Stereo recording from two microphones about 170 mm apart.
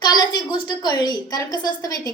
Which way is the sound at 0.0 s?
25° left (ahead or behind).